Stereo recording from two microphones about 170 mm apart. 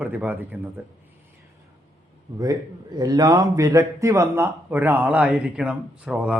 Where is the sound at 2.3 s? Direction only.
20° right (ahead or behind).